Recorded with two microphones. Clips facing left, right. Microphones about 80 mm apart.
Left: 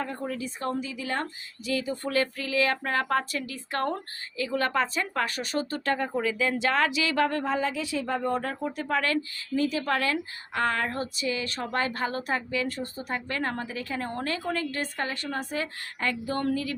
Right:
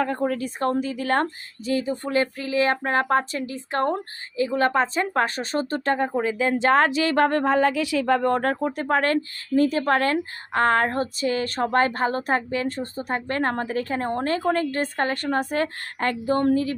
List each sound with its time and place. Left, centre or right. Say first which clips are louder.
0.0 s speech: right 8 dB; right
1.6 s speech: right 5 dB; right
8.6 s speech: right 6 dB; right
16.2 s speech: right 10 dB; right